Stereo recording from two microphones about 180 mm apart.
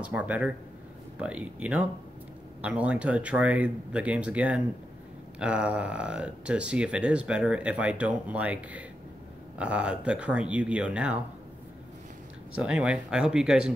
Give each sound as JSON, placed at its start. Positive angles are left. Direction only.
{"t": 0.0, "sound": "speech", "side_deg": -10}
{"t": 12.5, "sound": "speech", "side_deg": -5}